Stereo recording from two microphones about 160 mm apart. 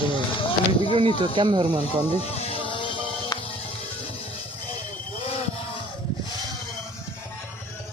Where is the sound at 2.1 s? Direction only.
40° left (ahead or behind).